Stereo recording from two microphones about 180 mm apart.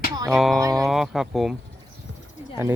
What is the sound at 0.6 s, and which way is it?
Speech, 20° right (ahead or behind).